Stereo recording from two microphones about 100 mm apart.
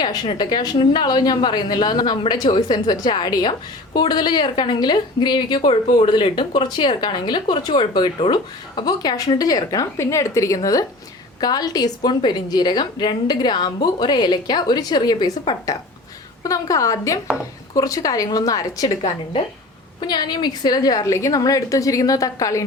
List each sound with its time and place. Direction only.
0.3 s a woman's voice: 45° left (ahead or behind)
20.0 s a woman's voice: 45° left (ahead or behind)